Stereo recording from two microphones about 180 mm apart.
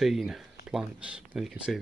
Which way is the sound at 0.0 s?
Centre (ahead or behind).